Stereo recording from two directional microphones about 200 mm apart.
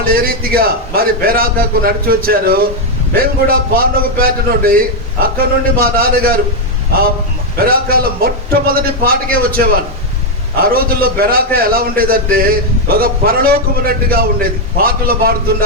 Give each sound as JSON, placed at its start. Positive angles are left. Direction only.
{"t": 0.0, "sound": "a man's voice", "side_deg": -50}
{"t": 7.6, "sound": "a man's voice", "side_deg": -50}